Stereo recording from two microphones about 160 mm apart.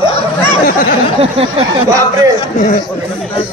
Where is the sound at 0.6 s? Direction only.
60° left (ahead or behind).